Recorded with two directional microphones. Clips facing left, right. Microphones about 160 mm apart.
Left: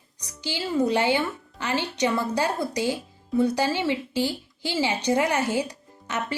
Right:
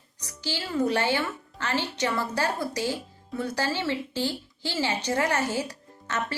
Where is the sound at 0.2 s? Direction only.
15° left (ahead or behind).